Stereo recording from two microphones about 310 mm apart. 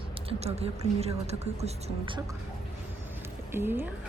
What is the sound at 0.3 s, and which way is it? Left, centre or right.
Speech, centre.